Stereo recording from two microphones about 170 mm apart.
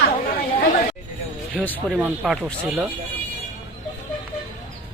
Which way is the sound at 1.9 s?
5° right (ahead or behind).